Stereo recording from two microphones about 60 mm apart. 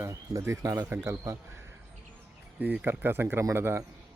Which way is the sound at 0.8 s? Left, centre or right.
Right.